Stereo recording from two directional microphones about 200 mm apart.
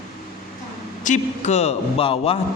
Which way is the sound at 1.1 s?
35° left (ahead or behind).